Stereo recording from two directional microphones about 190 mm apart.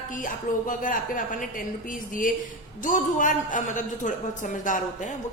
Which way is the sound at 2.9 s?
45° left (ahead or behind).